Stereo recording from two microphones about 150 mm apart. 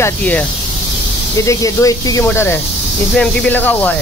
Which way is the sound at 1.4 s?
20° left (ahead or behind).